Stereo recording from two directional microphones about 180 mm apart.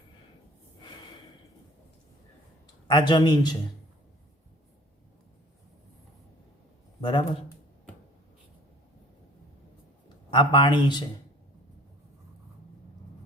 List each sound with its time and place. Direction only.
2.8 s a man's voice: 25° left (ahead or behind)
7.0 s speech: 25° left (ahead or behind)
10.3 s a man's voice: 25° left (ahead or behind)